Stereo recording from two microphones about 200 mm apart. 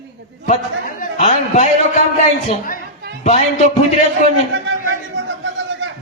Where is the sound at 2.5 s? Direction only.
45° left (ahead or behind).